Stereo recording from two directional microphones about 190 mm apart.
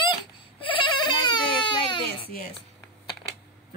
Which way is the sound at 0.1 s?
25° left (ahead or behind).